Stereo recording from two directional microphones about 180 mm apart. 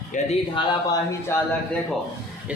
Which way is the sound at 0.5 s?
25° left (ahead or behind).